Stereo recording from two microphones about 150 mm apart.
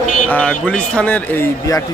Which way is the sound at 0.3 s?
10° left (ahead or behind).